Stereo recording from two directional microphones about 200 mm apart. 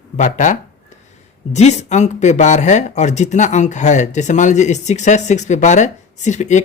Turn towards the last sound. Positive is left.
turn(degrees=35)  # may be behind; listen again after turning